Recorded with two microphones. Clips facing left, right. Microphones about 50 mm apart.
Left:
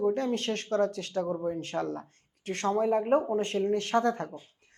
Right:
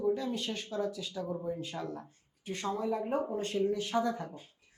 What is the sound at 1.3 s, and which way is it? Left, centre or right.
Speech, left.